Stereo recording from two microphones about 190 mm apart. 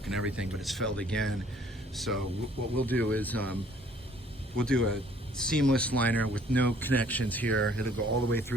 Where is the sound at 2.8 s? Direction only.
5° left (ahead or behind).